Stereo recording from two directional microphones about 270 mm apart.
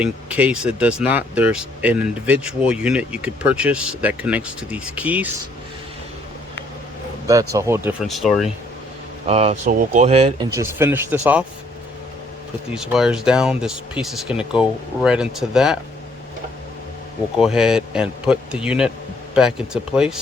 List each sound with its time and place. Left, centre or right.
0.0 s speech: centre
7.3 s speech: centre
9.2 s speech: right; by 11.4 s centre
12.7 s speech: centre
17.3 s speech: centre